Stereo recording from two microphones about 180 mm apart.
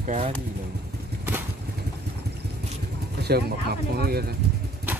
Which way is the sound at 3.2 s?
60° right (ahead or behind).